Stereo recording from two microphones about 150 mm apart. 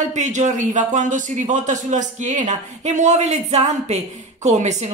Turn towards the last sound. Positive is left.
turn(degrees=-50)  # may be behind; listen again after turning